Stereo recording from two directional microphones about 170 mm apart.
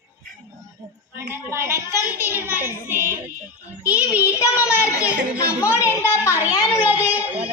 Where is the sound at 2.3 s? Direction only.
10° right (ahead or behind).